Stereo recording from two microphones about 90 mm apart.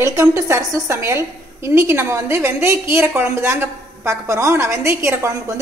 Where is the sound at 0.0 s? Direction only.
30° right (ahead or behind).